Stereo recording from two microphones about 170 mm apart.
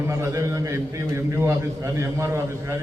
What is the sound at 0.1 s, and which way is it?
A man's voice, 15° right (ahead or behind).